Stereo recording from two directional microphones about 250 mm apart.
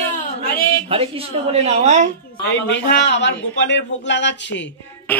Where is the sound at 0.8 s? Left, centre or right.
Right.